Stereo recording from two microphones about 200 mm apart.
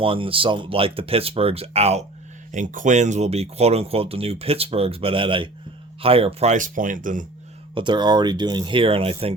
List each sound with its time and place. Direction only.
0.0 s speech: 25° right (ahead or behind)
7.8 s speech: 20° right (ahead or behind)